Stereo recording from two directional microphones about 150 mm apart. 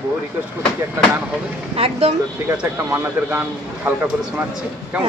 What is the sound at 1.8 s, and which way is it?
Speech, 40° right (ahead or behind).